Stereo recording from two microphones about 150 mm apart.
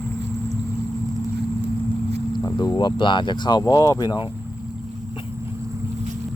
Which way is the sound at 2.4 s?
25° left (ahead or behind).